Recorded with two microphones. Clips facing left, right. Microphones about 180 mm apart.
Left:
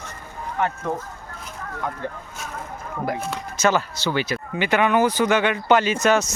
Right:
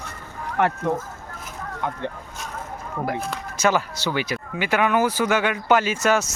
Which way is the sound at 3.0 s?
Centre (ahead or behind).